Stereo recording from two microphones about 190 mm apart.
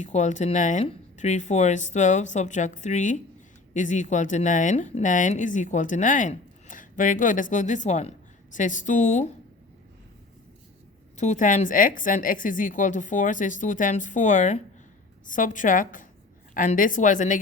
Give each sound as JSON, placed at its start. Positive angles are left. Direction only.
{"t": 0.0, "sound": "a woman's voice", "side_deg": 40}
{"t": 11.2, "sound": "a woman's voice", "side_deg": 40}